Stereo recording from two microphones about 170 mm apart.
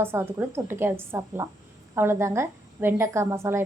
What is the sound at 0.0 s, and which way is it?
A woman's voice, 15° right (ahead or behind).